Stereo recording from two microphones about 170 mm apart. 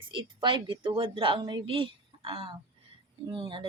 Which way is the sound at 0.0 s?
30° right (ahead or behind).